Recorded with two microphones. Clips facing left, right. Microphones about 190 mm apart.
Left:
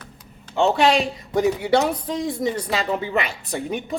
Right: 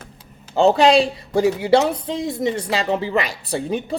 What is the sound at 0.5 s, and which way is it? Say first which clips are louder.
A woman's voice: right 4 dB; 35° right (ahead or behind).